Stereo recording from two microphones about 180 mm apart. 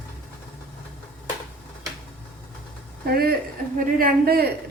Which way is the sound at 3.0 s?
55° right (ahead or behind).